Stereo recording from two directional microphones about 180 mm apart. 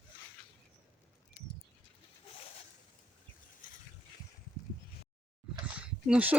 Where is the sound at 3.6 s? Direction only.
45° left (ahead or behind).